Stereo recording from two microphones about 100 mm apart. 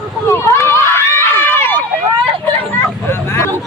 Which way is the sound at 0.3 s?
25° left (ahead or behind).